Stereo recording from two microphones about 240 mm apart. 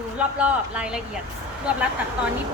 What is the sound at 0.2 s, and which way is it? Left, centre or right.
Speech, centre.